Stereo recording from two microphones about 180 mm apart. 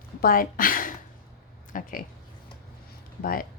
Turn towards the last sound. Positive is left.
turn(degrees=50)  # may be behind; listen again after turning